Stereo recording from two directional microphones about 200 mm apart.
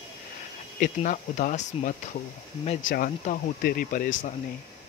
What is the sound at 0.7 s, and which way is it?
Speech, 40° left (ahead or behind).